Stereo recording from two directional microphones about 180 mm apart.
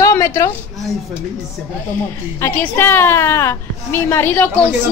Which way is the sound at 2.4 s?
10° left (ahead or behind).